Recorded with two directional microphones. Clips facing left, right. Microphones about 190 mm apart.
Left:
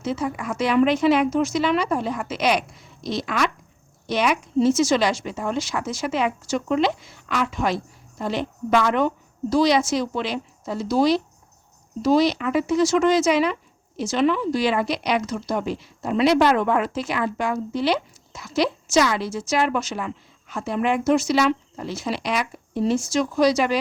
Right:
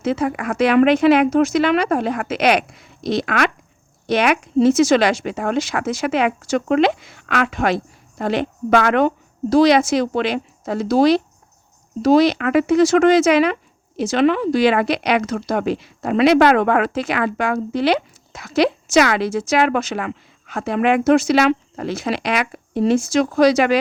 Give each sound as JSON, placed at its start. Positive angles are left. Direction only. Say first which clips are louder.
{"t": 0.0, "sound": "speech", "louder": "right 5 dB", "side_deg": -65}